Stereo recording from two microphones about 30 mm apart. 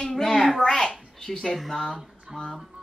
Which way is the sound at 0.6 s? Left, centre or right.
Left.